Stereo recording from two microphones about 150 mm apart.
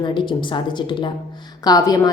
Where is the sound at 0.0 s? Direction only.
30° left (ahead or behind).